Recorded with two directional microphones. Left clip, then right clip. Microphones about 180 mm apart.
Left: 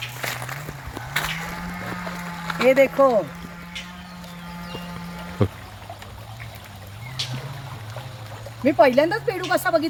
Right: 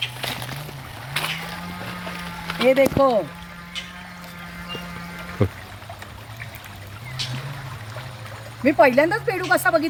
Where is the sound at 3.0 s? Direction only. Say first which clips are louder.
Left 1 dB; 15° left (ahead or behind).